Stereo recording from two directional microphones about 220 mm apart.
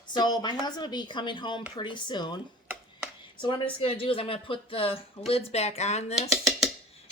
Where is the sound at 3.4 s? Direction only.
20° left (ahead or behind).